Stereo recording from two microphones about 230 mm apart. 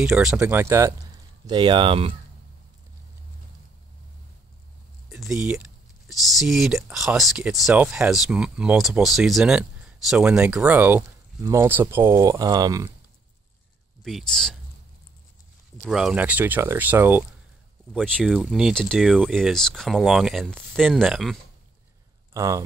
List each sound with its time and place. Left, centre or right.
0.0 s speech: centre; by 2.1 s right
5.1 s speech: centre
14.0 s speech: centre
15.8 s speech: centre
17.9 s speech: centre
22.3 s speech: centre